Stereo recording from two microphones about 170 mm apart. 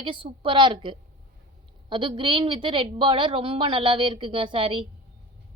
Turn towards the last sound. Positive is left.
turn(degrees=-30)  # may be behind; listen again after turning